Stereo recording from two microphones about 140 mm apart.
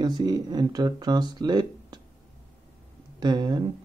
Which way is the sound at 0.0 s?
30° right (ahead or behind).